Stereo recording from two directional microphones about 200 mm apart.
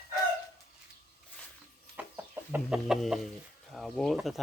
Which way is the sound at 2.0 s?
10° right (ahead or behind).